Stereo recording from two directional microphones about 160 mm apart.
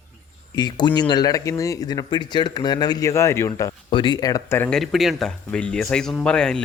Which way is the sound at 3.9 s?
30° left (ahead or behind).